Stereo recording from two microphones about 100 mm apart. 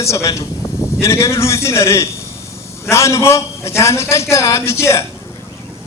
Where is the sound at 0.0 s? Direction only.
30° left (ahead or behind).